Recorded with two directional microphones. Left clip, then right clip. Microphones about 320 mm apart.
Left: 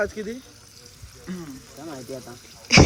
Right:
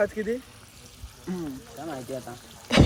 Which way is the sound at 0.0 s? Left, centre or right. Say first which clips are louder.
Right 1 dB; centre.